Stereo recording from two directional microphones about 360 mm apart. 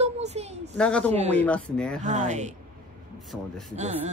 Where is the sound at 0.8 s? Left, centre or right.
Centre.